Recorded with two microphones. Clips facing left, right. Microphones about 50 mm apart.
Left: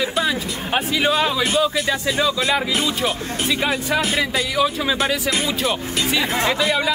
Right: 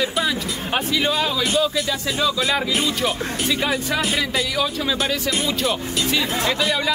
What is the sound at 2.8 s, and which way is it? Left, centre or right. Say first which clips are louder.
Speech: even; centre.